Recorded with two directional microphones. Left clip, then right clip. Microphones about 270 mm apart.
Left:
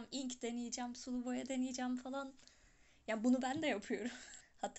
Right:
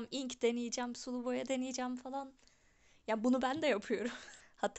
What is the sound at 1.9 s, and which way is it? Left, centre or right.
Speech, centre.